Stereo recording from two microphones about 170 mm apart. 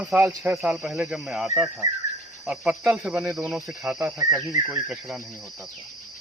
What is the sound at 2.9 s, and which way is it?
Speech, 5° right (ahead or behind).